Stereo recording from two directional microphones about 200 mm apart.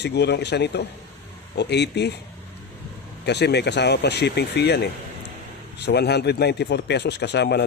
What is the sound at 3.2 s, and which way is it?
Speech, 60° left (ahead or behind).